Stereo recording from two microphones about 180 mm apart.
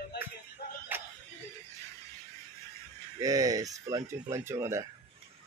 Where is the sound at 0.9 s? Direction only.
10° right (ahead or behind).